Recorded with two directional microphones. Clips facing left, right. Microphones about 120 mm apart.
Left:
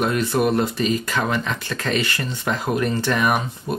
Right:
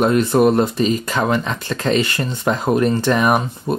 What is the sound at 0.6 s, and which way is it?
Speech, 25° right (ahead or behind).